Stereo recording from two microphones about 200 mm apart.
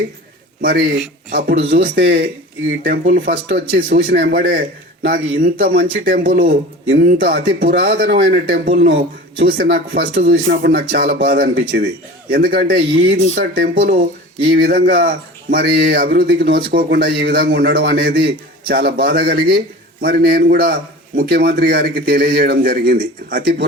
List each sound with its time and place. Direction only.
1.3 s speech: 45° right (ahead or behind)
6.8 s speech: 70° right (ahead or behind)
7.1 s speech: 50° right (ahead or behind)